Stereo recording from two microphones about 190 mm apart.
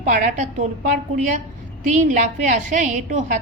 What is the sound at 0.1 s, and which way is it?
A woman's voice, 40° right (ahead or behind).